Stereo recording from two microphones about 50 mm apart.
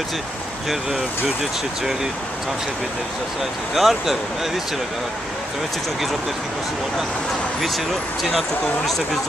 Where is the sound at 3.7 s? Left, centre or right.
Centre.